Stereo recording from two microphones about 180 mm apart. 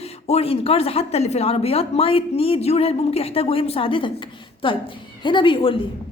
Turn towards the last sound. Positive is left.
turn(degrees=30)  # may be behind; listen again after turning